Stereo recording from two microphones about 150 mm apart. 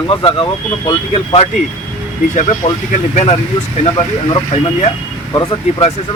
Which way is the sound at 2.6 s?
45° left (ahead or behind).